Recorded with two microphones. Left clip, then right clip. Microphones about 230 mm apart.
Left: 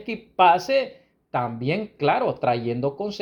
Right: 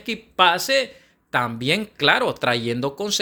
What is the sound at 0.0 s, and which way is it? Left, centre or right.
A man's voice, right.